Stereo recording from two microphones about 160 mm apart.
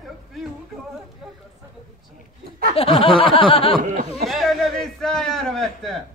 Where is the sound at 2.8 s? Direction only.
35° left (ahead or behind).